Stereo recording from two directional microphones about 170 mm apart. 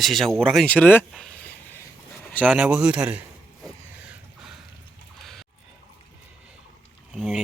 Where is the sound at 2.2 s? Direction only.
10° left (ahead or behind).